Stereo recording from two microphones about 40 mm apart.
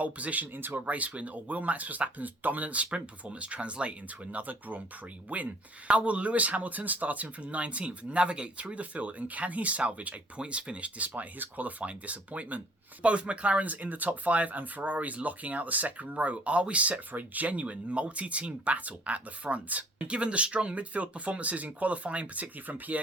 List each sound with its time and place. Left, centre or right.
0.0 s speech: right
0.5 s speech: right
0.9 s speech: right
17.1 s speech: right
22.6 s speech: right